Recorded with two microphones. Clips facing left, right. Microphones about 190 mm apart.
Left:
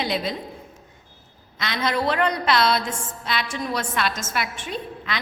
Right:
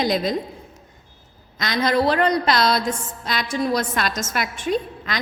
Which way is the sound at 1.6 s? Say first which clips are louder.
Right 5 dB; 40° right (ahead or behind).